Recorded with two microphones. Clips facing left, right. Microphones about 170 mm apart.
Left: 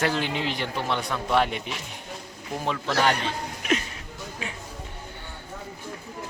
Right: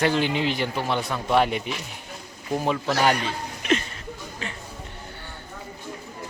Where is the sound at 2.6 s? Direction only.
10° right (ahead or behind).